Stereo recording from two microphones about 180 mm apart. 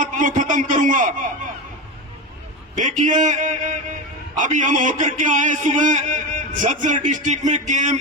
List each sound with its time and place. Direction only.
0.0 s a man's voice: 45° right (ahead or behind)
2.7 s a man's voice: 45° right (ahead or behind)